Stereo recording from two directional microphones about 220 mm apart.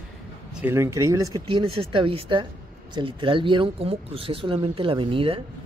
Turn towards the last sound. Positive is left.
turn(degrees=-25)  # may be behind; listen again after turning